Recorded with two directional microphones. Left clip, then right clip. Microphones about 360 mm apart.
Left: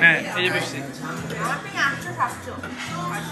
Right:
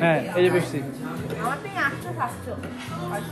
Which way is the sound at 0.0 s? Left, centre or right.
Centre.